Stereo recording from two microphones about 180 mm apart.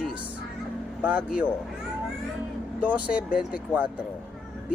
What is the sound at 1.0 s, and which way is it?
Speech, 5° right (ahead or behind).